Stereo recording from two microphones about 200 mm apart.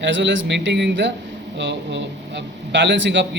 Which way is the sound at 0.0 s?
65° right (ahead or behind).